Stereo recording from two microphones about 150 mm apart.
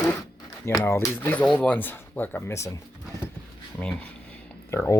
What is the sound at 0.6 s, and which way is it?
Speech, 15° left (ahead or behind).